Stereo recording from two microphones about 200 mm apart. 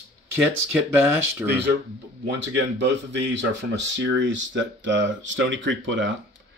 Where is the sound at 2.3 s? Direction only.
60° right (ahead or behind).